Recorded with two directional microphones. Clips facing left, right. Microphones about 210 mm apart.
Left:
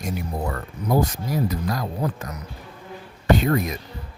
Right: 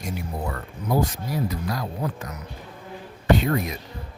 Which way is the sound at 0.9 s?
45° left (ahead or behind).